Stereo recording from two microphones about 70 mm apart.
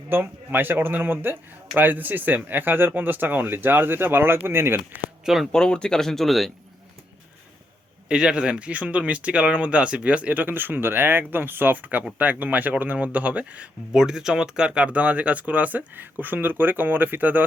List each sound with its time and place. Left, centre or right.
0.1 s speech: right
5.2 s speech: centre
5.5 s speech: centre
8.0 s speech: centre
13.9 s speech: centre; by 17.4 s right